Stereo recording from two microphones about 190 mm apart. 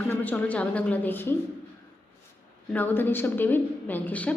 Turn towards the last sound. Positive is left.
turn(degrees=10)  # may be behind; listen again after turning